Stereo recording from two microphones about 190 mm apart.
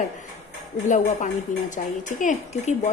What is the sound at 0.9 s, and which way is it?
A woman's voice, 40° left (ahead or behind).